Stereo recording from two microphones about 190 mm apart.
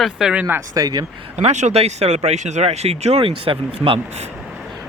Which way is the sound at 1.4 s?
35° right (ahead or behind).